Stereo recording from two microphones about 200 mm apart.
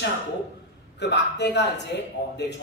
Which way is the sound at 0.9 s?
60° left (ahead or behind).